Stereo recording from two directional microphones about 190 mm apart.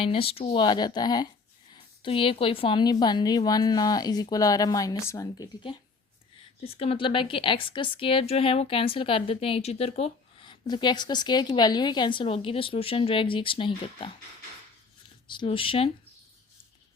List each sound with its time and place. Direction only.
0.0 s a woman's voice: 30° left (ahead or behind)
6.7 s a woman's voice: 30° left (ahead or behind)
15.3 s a woman's voice: 25° left (ahead or behind)